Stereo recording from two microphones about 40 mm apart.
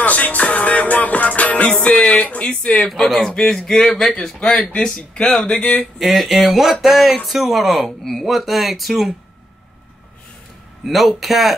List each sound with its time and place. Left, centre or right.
0.0 s music: left
2.0 s a sound: left
2.4 s speech: left
3.1 s speech: centre
4.4 s speech: left
5.9 s speech: centre
10.9 s speech: centre